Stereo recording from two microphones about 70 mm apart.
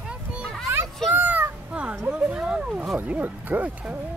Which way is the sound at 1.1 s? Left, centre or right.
Right.